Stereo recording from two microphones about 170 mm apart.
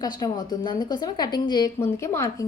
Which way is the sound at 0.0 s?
25° left (ahead or behind).